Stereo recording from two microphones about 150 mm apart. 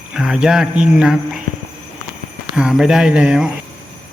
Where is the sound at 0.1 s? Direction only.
5° right (ahead or behind).